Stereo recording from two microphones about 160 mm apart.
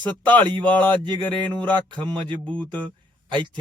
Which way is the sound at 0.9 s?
30° right (ahead or behind).